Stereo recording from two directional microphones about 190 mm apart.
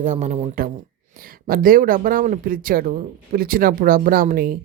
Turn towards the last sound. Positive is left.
turn(degrees=-50)  # may be behind; listen again after turning